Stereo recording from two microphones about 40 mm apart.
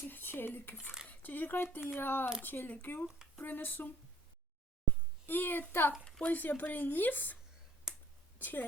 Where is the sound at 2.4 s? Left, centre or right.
Left.